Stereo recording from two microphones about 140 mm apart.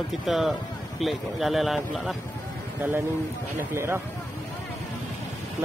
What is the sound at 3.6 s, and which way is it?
Speech, 15° right (ahead or behind).